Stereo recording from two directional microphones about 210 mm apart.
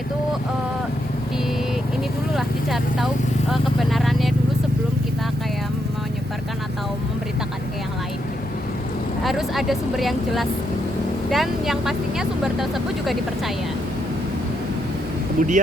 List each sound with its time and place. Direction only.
2.3 s vehicle: centre (ahead or behind)
3.5 s speech: centre (ahead or behind)
9.2 s speech: centre (ahead or behind)
15.4 s speech: 35° right (ahead or behind)